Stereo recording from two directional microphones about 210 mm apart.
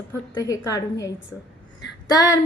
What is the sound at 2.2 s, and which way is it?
Speech, 15° left (ahead or behind).